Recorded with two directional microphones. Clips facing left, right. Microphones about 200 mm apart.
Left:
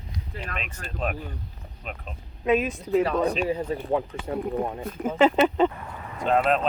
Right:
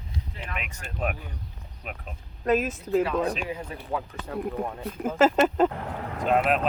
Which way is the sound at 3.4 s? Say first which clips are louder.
Left 8 dB; 30° left (ahead or behind).